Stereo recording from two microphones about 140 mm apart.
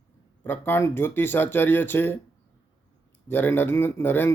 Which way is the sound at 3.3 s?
15° left (ahead or behind).